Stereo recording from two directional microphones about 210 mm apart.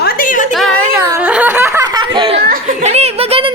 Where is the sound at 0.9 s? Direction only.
15° right (ahead or behind).